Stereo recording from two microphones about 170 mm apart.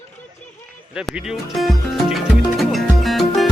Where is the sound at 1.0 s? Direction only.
5° right (ahead or behind).